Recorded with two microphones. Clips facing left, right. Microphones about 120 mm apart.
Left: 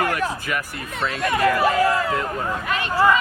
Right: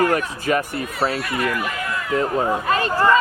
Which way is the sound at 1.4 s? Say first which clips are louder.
Left 10 dB; 35° left (ahead or behind).